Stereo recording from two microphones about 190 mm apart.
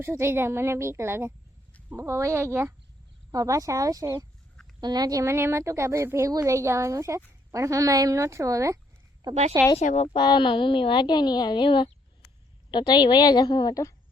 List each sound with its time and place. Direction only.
0.0 s a woman's voice: 15° right (ahead or behind)
9.7 s speech: 35° left (ahead or behind)
10.2 s a woman's voice: 25° left (ahead or behind)